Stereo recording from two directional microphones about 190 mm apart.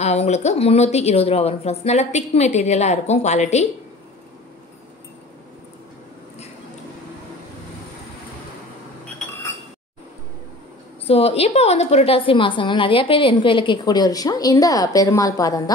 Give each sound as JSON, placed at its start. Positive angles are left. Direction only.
{"t": 0.0, "sound": "a woman's voice", "side_deg": 35}
{"t": 11.1, "sound": "a woman's voice", "side_deg": 30}